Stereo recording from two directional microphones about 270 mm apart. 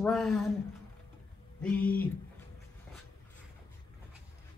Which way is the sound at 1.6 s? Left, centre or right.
Centre.